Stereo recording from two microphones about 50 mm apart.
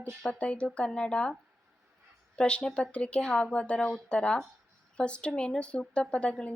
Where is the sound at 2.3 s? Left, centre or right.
Centre.